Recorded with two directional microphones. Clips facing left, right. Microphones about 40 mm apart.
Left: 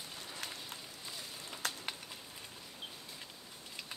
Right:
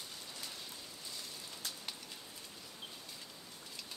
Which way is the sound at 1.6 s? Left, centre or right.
Left.